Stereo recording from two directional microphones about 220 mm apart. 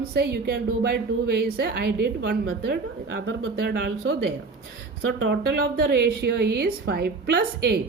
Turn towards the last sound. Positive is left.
turn(degrees=-45)  # may be behind; listen again after turning